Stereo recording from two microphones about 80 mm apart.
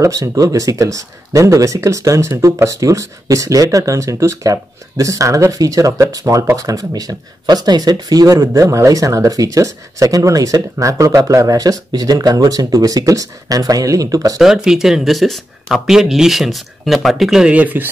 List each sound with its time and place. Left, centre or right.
0.0 s speech: right
14.4 s speech: centre